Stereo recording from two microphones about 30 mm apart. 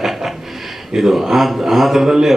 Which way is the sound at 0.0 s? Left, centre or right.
Centre.